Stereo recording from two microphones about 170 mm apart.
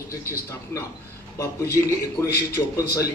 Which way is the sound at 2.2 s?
15° left (ahead or behind).